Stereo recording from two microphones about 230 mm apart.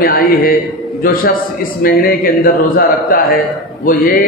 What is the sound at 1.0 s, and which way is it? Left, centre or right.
A man's voice, left.